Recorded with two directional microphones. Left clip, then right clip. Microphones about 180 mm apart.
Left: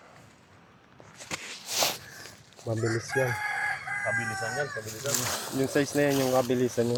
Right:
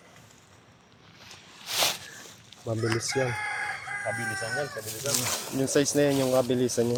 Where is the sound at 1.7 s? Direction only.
10° left (ahead or behind).